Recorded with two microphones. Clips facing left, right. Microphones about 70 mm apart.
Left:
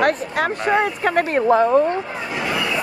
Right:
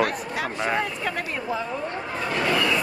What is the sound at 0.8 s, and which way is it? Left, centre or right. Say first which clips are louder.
Speech: left 9 dB; left.